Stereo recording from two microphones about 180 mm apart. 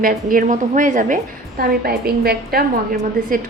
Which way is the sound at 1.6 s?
60° right (ahead or behind).